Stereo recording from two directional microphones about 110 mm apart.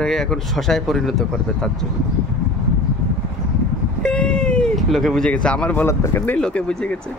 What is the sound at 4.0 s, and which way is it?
Vehicle, 10° left (ahead or behind).